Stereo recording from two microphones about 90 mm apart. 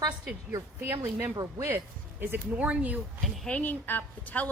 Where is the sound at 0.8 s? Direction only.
25° right (ahead or behind).